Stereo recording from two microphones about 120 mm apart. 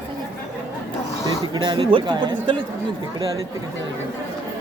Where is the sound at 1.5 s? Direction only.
40° right (ahead or behind).